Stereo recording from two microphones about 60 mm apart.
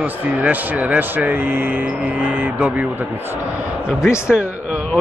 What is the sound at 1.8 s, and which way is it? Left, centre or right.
Speech, right.